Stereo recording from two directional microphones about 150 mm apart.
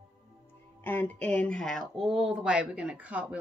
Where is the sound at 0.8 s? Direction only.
10° left (ahead or behind).